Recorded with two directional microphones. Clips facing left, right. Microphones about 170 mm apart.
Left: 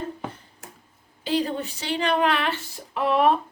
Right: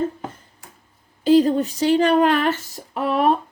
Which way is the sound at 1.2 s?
40° right (ahead or behind).